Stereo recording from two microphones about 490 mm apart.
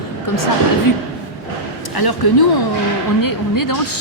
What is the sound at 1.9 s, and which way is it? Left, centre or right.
A woman's voice, left.